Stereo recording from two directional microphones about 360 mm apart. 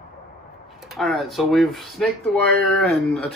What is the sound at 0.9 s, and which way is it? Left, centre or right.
Speech, centre.